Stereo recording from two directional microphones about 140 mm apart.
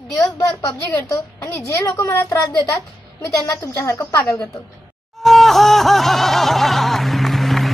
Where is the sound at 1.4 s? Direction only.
20° left (ahead or behind).